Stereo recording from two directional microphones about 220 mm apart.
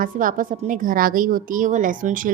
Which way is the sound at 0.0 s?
40° right (ahead or behind).